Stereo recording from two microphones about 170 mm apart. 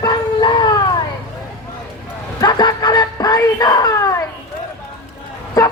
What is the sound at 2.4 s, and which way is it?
Music, 25° left (ahead or behind).